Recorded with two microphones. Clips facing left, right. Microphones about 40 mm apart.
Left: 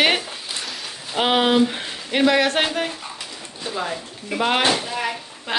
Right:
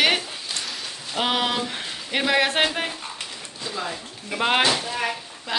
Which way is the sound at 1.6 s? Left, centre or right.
Centre.